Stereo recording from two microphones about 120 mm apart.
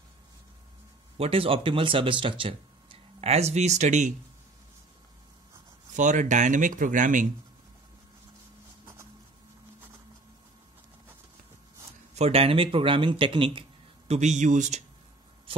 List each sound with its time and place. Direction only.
1.1 s speech: 55° right (ahead or behind); by 4.1 s 80° right
5.9 s speech: 90° right
12.2 s speech: 55° right (ahead or behind)
14.1 s speech: 75° right (ahead or behind); by 14.8 s 90° right